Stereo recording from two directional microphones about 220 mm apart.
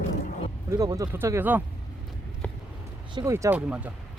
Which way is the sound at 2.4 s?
5° left (ahead or behind).